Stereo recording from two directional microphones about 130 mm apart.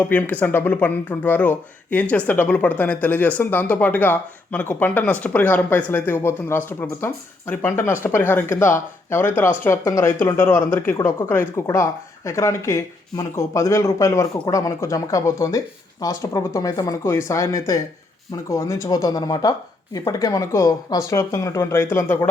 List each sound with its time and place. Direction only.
0.1 s speech: 15° left (ahead or behind)